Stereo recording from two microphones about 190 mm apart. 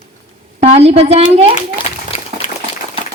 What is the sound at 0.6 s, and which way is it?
Speech, 35° right (ahead or behind).